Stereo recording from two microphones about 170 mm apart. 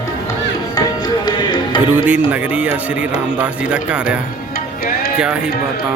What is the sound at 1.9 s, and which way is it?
Speech, 10° right (ahead or behind).